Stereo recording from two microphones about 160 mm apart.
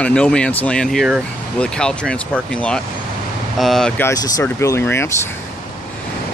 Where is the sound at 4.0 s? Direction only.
20° left (ahead or behind).